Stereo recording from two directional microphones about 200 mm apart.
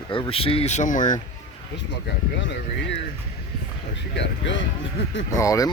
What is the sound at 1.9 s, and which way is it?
Speech, 60° left (ahead or behind).